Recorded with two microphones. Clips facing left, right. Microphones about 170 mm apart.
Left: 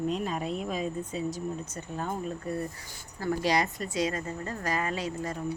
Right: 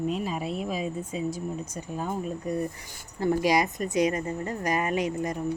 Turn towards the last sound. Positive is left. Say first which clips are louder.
# right 5 dB
turn(degrees=-20)  # may be behind; listen again after turning